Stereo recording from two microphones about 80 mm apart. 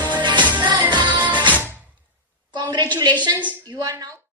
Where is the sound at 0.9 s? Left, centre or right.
Right.